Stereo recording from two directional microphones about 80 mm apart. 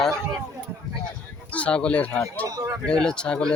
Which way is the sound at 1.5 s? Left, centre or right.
Centre.